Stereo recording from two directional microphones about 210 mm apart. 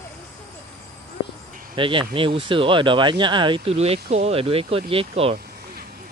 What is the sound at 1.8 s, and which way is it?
Speech, 25° right (ahead or behind).